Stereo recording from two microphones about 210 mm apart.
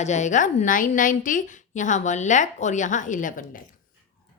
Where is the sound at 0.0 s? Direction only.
35° left (ahead or behind).